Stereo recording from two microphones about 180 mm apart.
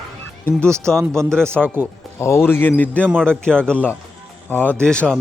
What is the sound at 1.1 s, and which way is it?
Speech, 5° left (ahead or behind).